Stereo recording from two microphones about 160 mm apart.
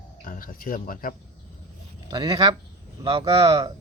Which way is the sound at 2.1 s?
25° right (ahead or behind).